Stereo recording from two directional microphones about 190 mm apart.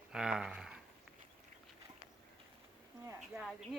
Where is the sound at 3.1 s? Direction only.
5° right (ahead or behind).